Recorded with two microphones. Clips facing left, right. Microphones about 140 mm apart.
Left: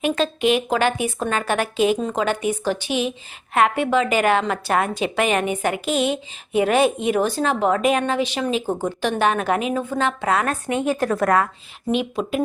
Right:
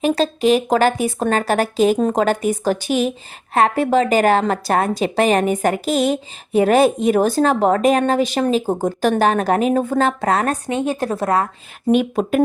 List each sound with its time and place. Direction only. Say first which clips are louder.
0.0 s speech: right 3 dB; 35° right (ahead or behind)
10.7 s a woman's voice: right 1 dB; 25° right (ahead or behind)
11.9 s speech: right 6 dB; 50° right (ahead or behind)